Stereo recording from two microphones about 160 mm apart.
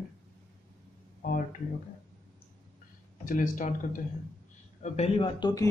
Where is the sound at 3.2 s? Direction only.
55° left (ahead or behind).